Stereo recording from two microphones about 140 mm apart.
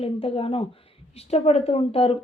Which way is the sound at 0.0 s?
45° left (ahead or behind).